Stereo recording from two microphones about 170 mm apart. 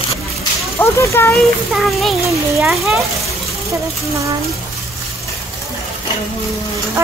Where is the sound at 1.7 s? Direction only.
Centre (ahead or behind).